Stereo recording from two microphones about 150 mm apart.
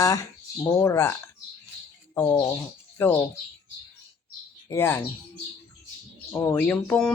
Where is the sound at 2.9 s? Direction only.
15° left (ahead or behind).